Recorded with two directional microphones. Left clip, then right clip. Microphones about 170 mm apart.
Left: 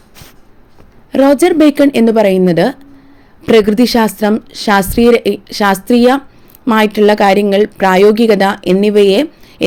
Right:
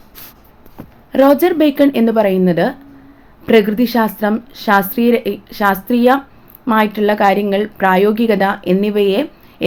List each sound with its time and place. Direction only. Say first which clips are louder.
1.1 s a woman's voice: left 2 dB; 35° left (ahead or behind)